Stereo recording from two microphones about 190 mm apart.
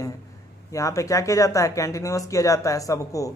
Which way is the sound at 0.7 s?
15° left (ahead or behind).